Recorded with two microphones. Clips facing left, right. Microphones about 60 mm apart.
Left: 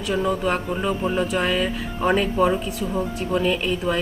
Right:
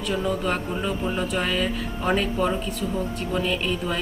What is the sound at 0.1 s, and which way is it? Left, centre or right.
Speech, centre.